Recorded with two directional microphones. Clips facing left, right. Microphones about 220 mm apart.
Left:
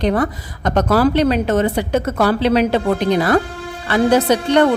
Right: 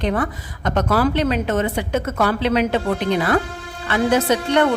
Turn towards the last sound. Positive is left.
turn(degrees=35)  # may be behind; listen again after turning